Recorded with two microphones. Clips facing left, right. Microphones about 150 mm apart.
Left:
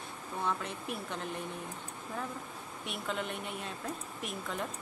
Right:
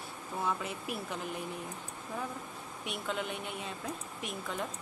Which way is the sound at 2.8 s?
Centre (ahead or behind).